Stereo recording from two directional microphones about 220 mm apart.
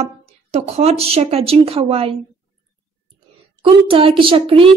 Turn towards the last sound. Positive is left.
turn(degrees=-25)  # may be behind; listen again after turning